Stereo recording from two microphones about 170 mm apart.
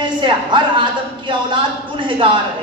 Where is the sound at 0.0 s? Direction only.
25° right (ahead or behind).